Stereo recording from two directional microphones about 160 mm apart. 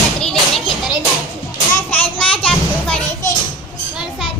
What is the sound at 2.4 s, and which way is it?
Children playing, 10° left (ahead or behind).